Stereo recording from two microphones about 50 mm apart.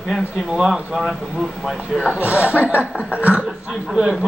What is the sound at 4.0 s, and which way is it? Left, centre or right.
Speech, centre.